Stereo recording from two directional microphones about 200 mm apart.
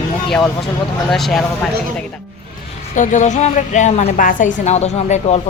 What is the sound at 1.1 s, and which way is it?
Speech, centre (ahead or behind).